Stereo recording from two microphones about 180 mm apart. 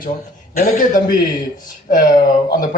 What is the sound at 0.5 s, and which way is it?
A man's voice, 45° left (ahead or behind).